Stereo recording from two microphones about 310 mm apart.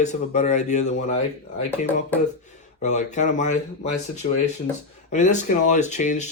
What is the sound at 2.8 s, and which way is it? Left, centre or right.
Speech, left.